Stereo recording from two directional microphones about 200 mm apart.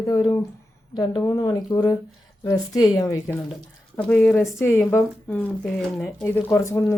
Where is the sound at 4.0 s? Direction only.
5° left (ahead or behind).